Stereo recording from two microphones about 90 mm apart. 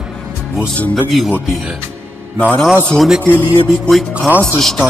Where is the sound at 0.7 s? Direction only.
15° left (ahead or behind).